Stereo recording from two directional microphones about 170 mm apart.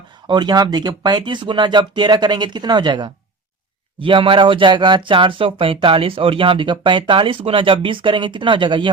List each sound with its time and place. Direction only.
0.3 s speech: 25° right (ahead or behind)